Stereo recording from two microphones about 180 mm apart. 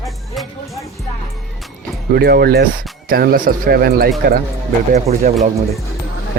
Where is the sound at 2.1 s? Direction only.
60° right (ahead or behind).